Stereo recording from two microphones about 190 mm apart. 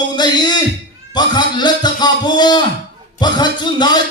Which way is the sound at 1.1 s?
20° left (ahead or behind).